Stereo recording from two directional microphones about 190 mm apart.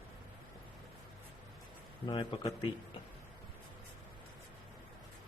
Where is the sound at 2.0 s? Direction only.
25° left (ahead or behind).